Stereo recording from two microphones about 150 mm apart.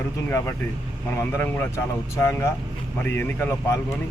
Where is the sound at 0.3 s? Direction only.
15° left (ahead or behind).